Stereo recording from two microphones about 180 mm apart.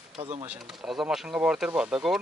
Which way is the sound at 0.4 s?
5° right (ahead or behind).